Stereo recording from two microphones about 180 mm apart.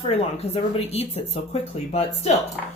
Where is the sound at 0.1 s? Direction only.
35° left (ahead or behind).